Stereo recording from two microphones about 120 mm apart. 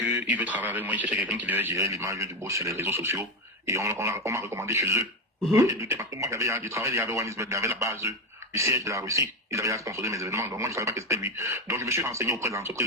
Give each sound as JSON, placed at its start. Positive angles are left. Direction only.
{"t": 0.0, "sound": "speech", "side_deg": -15}